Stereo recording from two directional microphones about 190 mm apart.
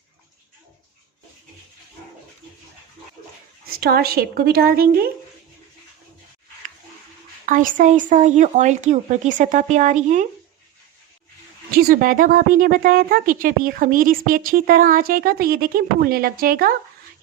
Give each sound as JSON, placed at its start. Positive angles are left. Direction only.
{"t": 3.7, "sound": "speech", "side_deg": -55}
{"t": 7.4, "sound": "speech", "side_deg": -45}
{"t": 11.7, "sound": "speech", "side_deg": -55}